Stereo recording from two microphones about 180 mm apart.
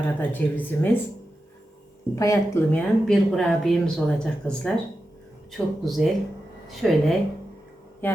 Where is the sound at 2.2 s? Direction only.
15° left (ahead or behind).